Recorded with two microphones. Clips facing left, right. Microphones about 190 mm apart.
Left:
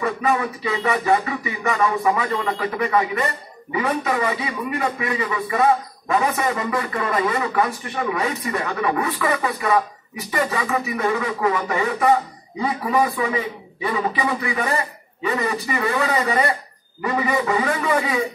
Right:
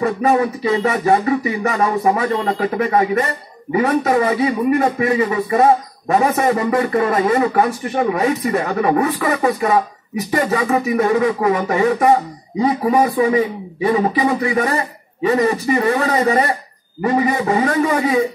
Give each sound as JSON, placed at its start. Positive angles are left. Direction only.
{"t": 0.0, "sound": "speech", "side_deg": -40}